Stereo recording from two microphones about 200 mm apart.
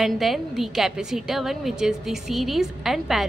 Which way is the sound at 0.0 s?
Centre (ahead or behind).